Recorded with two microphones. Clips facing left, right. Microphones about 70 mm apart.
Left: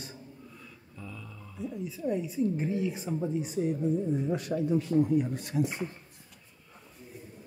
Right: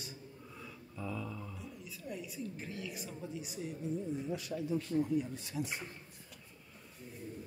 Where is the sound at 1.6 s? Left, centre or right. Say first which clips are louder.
Left 14 dB; left.